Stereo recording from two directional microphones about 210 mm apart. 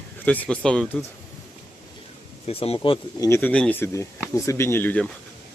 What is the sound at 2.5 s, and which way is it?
Speech, 25° left (ahead or behind).